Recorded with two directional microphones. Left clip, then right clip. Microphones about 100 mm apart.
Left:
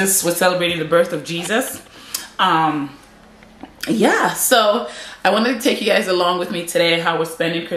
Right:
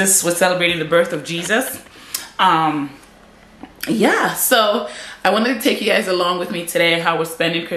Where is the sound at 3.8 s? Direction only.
5° left (ahead or behind).